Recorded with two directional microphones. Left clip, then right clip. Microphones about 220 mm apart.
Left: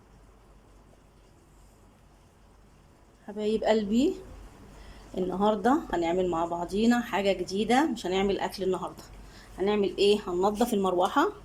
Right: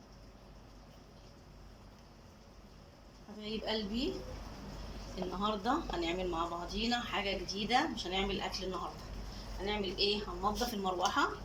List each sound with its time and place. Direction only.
3.3 s speech: 45° left (ahead or behind)
5.4 s speech: 40° left (ahead or behind)
9.6 s speech: 55° left (ahead or behind)